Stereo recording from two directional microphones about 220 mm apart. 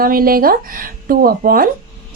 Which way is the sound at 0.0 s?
40° right (ahead or behind).